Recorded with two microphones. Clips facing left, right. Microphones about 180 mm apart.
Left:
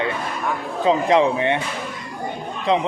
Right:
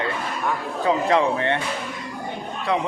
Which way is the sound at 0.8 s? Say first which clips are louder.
Left 3 dB; 20° left (ahead or behind).